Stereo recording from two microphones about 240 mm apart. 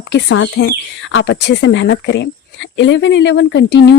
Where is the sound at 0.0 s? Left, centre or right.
Left.